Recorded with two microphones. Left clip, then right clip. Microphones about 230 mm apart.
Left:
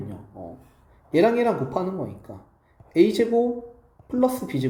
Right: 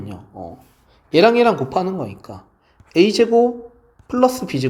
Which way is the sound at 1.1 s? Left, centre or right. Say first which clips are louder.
Right 7 dB; right.